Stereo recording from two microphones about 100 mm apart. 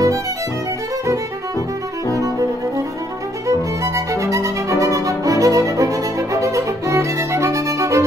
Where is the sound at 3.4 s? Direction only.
30° right (ahead or behind).